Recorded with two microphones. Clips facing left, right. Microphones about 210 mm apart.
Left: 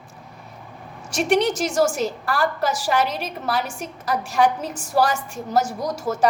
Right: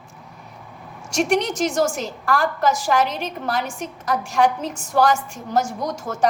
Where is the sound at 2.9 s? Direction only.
5° left (ahead or behind).